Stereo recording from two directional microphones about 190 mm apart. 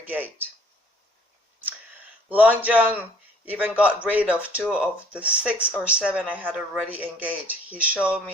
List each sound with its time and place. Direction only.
0.0 s speech: 10° right (ahead or behind)
2.3 s speech: 10° right (ahead or behind)